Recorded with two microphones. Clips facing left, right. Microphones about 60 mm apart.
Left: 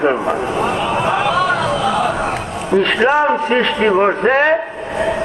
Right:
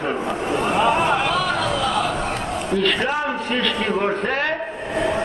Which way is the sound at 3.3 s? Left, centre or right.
Left.